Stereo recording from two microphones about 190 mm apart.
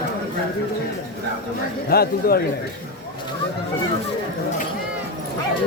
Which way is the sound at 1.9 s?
55° left (ahead or behind).